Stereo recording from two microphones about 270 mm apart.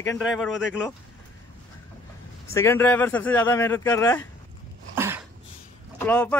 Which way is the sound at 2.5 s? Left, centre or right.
Centre.